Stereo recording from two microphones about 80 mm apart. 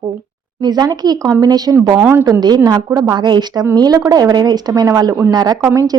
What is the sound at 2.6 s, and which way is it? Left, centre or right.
A woman's voice, right.